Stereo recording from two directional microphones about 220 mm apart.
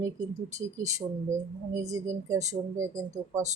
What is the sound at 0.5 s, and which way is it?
A woman's voice, 15° right (ahead or behind).